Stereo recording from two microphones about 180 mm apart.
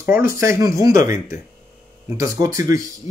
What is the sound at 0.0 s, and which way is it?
A man's voice, 15° right (ahead or behind).